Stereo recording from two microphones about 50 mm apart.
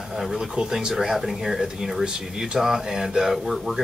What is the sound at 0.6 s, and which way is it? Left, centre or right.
Speech, centre.